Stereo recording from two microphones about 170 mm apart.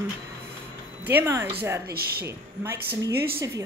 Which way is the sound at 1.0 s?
10° right (ahead or behind).